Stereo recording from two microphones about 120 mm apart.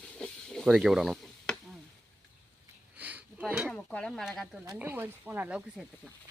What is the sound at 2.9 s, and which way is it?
Sniff, 15° right (ahead or behind).